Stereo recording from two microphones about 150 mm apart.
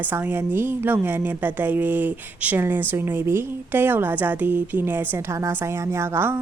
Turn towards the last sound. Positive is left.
turn(degrees=-15)  # may be behind; listen again after turning